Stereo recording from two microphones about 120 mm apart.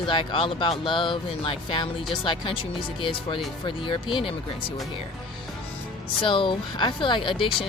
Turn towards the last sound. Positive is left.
turn(degrees=45)  # may be behind; listen again after turning